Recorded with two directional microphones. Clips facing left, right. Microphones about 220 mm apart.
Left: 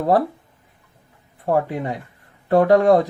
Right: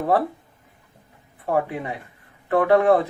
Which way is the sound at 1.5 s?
40° left (ahead or behind).